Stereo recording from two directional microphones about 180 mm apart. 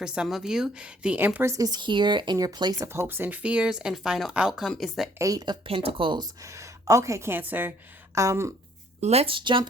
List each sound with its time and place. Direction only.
0.0 s a woman's voice: 5° right (ahead or behind)
5.1 s a woman's voice: 20° right (ahead or behind)
9.0 s speech: 35° right (ahead or behind)